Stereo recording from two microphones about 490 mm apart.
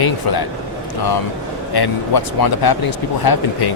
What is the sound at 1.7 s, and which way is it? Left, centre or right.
Speech, left.